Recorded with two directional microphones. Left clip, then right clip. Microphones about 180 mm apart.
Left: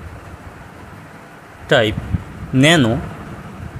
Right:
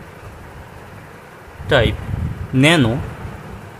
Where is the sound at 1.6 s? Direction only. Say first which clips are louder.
Left 1 dB; 10° left (ahead or behind).